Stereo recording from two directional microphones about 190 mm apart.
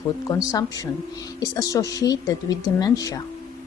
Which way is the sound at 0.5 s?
20° left (ahead or behind).